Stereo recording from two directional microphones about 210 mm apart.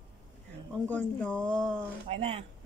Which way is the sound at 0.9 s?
5° left (ahead or behind).